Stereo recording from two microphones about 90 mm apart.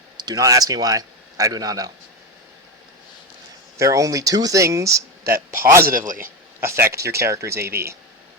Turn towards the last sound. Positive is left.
turn(degrees=-30)  # may be behind; listen again after turning